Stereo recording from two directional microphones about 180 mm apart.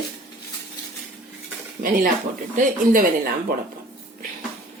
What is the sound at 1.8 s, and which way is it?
Speech, 45° right (ahead or behind).